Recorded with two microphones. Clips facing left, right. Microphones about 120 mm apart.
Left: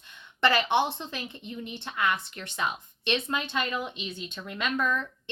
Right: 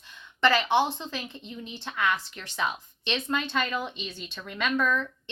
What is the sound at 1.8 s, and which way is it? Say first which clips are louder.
Speech: right 1 dB; centre (ahead or behind).